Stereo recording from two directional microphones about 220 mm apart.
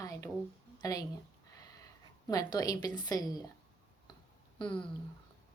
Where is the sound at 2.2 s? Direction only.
15° left (ahead or behind).